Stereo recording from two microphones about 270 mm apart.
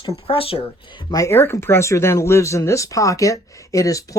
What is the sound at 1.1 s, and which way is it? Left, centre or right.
Speech, centre.